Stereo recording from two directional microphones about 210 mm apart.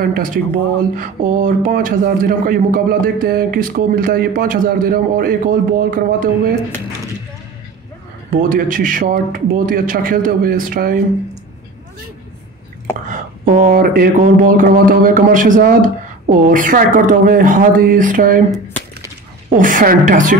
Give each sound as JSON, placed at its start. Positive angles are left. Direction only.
{"t": 0.0, "sound": "speech", "side_deg": -40}
{"t": 8.4, "sound": "speech", "side_deg": -40}
{"t": 13.1, "sound": "speech", "side_deg": -35}
{"t": 19.6, "sound": "speech", "side_deg": -40}